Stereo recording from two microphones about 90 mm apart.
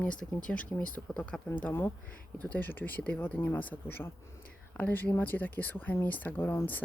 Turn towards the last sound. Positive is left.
turn(degrees=20)  # may be behind; listen again after turning